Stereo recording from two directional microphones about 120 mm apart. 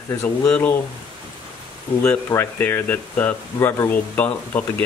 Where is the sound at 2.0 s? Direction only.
15° left (ahead or behind).